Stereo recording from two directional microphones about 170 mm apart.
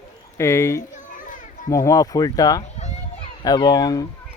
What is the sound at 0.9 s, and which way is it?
Children playing, 50° left (ahead or behind).